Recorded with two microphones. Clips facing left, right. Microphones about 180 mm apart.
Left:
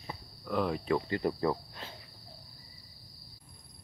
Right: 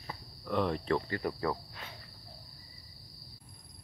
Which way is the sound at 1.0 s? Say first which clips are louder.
Left 3 dB; 20° left (ahead or behind).